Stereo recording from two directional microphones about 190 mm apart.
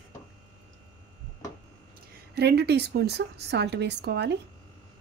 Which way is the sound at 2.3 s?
60° right (ahead or behind).